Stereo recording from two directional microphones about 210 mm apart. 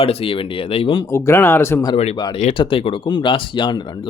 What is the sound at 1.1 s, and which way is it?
Speech, 15° left (ahead or behind).